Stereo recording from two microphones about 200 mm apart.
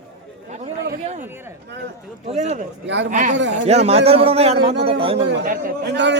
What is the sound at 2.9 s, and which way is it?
Speech, 60° right (ahead or behind).